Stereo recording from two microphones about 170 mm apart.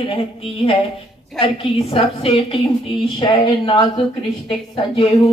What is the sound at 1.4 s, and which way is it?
A woman's voice, 30° left (ahead or behind).